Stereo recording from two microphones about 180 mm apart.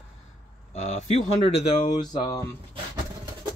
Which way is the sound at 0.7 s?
40° left (ahead or behind).